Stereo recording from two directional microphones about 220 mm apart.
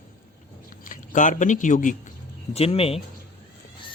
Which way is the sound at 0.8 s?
35° left (ahead or behind).